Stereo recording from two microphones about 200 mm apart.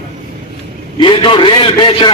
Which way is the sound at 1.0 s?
25° left (ahead or behind).